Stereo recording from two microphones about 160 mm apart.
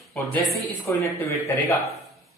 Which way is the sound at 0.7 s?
15° left (ahead or behind).